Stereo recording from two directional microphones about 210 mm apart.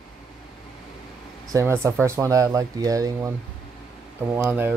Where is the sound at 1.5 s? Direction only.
10° right (ahead or behind).